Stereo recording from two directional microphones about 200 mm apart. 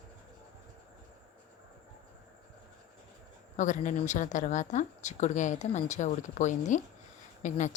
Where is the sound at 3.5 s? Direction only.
40° left (ahead or behind).